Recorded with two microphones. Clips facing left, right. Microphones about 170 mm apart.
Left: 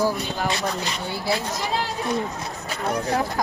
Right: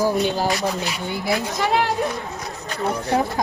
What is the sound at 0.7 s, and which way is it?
Speech, 20° right (ahead or behind).